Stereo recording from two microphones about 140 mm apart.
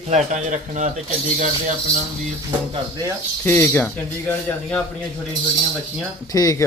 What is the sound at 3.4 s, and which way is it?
Speech, 15° left (ahead or behind).